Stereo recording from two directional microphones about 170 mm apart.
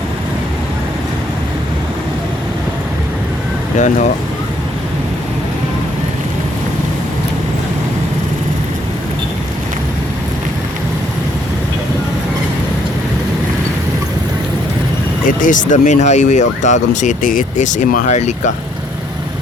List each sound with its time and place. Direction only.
3.8 s speech: 45° left (ahead or behind)
15.3 s speech: 50° left (ahead or behind)